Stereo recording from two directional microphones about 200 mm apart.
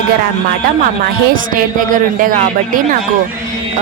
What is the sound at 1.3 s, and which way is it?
Speech, 45° right (ahead or behind).